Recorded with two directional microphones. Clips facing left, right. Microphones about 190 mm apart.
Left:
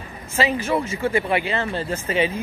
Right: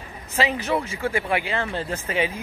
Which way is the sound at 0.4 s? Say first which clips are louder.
Left 2 dB; 15° right (ahead or behind).